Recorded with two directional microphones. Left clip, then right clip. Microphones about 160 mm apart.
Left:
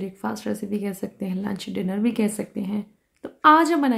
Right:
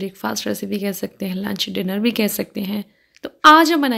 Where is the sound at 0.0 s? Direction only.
15° right (ahead or behind).